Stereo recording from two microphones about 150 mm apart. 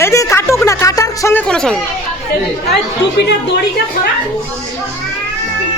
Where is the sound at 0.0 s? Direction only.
20° left (ahead or behind); by 1.8 s 5° left (ahead or behind).